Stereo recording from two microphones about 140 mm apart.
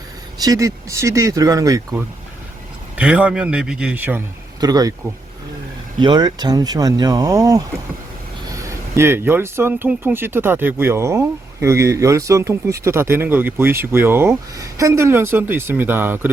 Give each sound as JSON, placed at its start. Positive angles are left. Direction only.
{"t": 0.4, "sound": "speech", "side_deg": -25}
{"t": 3.0, "sound": "speech", "side_deg": -10}
{"t": 4.6, "sound": "speech", "side_deg": -25}
{"t": 6.0, "sound": "speech", "side_deg": -30}
{"t": 8.6, "sound": "speech", "side_deg": -20}